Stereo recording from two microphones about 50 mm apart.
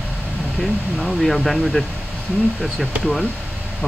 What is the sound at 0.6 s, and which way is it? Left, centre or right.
Speech, centre.